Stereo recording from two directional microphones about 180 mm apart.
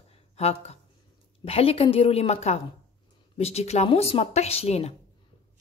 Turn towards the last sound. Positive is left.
turn(degrees=35)  # may be behind; listen again after turning